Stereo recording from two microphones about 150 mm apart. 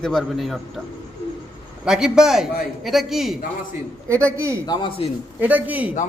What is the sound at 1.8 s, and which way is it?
A man's voice, 5° right (ahead or behind).